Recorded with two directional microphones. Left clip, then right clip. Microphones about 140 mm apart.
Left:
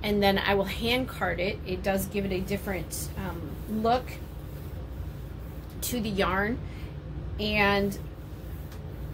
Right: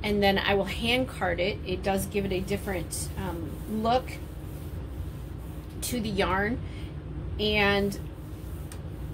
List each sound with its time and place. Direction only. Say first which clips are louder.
0.0 s a woman's voice: even; 25° left (ahead or behind)
5.8 s a woman's voice: even; 25° left (ahead or behind)